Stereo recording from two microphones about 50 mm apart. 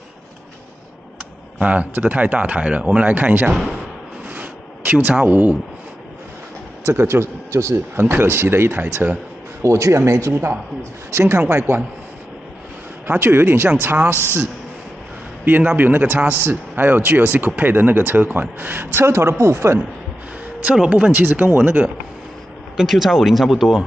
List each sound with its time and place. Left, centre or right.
1.6 s speech: right
4.3 s a sound: right
5.1 s speech: right
6.8 s a man's voice: right
7.9 s a man's voice: right
9.6 s speech: right
10.3 s a man's voice: right
11.1 s speech: right
11.3 s a man's voice: right
13.0 s a man's voice: right
15.7 s a man's voice: right
20.7 s speech: centre
21.1 s speech: right
22.8 s speech: centre